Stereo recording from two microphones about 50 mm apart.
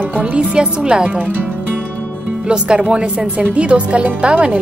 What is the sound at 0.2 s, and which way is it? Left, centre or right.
Speech, centre.